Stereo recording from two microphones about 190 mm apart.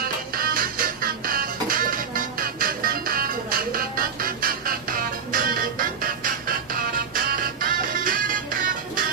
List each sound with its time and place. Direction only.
0.0 s music: 50° right (ahead or behind)